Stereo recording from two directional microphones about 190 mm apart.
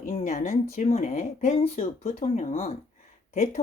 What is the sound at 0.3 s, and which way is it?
Speech, 40° left (ahead or behind).